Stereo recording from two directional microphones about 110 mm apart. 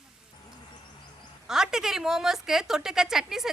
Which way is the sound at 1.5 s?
5° right (ahead or behind).